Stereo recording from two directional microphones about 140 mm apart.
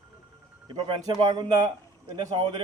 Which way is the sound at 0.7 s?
30° right (ahead or behind).